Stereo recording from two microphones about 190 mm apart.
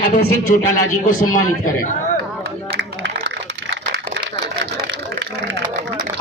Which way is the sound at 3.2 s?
65° right (ahead or behind).